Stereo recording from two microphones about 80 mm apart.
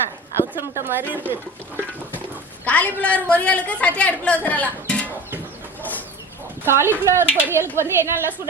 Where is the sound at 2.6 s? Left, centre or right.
Centre.